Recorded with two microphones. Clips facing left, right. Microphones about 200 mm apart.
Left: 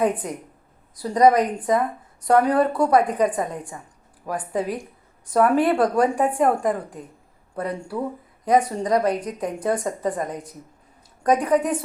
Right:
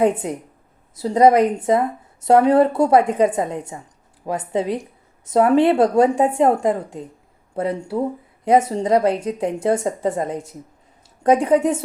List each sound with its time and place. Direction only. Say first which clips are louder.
0.0 s a woman's voice: right 4 dB; 25° right (ahead or behind)